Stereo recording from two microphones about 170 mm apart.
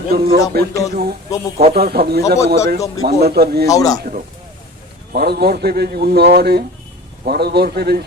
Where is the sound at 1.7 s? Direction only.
70° right (ahead or behind).